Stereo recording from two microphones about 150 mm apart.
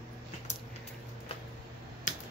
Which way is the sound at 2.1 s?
60° left (ahead or behind).